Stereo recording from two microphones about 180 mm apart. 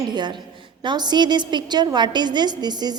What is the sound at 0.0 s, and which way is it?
A woman's voice, 25° right (ahead or behind).